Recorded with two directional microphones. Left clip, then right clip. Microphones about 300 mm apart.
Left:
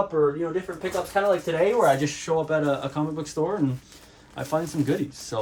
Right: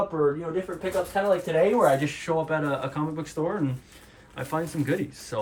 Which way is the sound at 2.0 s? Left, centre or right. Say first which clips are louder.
Left 2 dB; centre.